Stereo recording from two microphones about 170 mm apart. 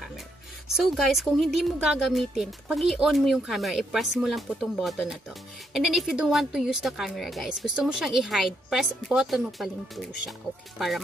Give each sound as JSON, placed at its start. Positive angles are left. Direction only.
{"t": 0.7, "sound": "speech", "side_deg": 0}